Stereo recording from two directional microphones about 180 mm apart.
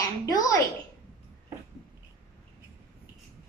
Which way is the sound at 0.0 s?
20° left (ahead or behind).